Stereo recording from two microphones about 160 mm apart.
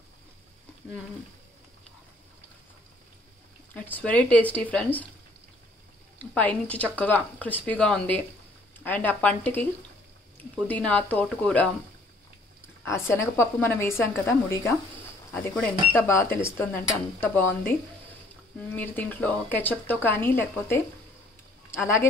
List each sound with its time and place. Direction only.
3.7 s speech: 10° left (ahead or behind)
6.1 s speech: 10° left (ahead or behind)
10.7 s speech: 10° left (ahead or behind)
12.8 s speech: 15° left (ahead or behind)
18.8 s speech: 10° left (ahead or behind)